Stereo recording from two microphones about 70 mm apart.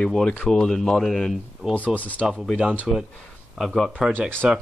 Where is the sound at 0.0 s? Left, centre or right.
Centre.